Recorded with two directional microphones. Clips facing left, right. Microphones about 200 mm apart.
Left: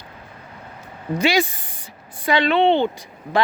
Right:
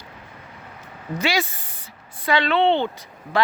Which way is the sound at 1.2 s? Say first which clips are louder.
Left 4 dB; 15° left (ahead or behind).